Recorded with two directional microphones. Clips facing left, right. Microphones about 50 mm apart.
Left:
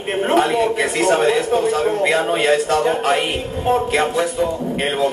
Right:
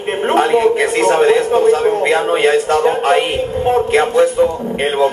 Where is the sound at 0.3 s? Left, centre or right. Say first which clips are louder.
Right 5 dB; right.